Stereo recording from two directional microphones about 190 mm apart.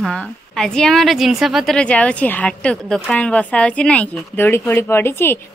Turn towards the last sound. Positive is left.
turn(degrees=10)  # may be behind; listen again after turning